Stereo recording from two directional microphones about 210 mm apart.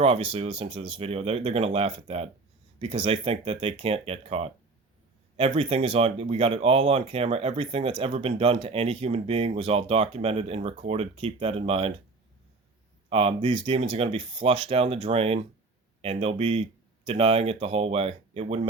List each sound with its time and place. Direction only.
0.0 s speech: 25° right (ahead or behind)
13.1 s speech: 25° right (ahead or behind)